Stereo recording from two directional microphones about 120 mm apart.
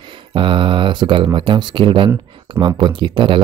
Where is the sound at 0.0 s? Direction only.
45° right (ahead or behind).